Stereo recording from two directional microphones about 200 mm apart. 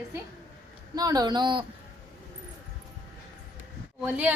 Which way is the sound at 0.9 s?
20° right (ahead or behind).